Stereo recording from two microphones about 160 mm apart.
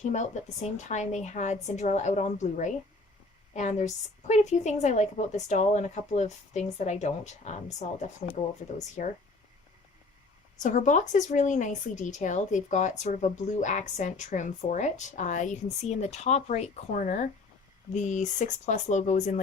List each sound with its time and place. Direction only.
0.0 s speech: 45° left (ahead or behind)
10.6 s speech: 50° left (ahead or behind)